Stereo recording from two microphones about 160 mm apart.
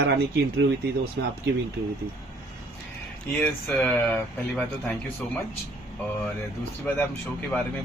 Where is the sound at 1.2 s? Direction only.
90° right.